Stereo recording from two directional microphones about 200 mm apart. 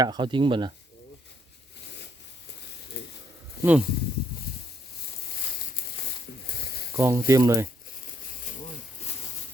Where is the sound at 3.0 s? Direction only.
55° left (ahead or behind).